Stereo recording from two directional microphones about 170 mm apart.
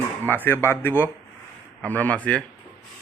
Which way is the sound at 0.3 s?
10° left (ahead or behind).